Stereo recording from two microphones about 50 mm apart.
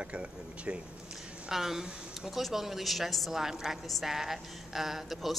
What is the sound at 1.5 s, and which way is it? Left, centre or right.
A woman's voice, centre.